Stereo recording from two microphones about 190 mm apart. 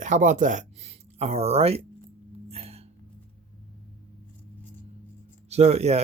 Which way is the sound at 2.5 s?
35° right (ahead or behind).